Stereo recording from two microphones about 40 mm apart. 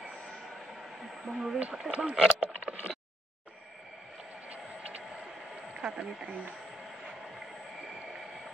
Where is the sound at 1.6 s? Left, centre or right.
Right.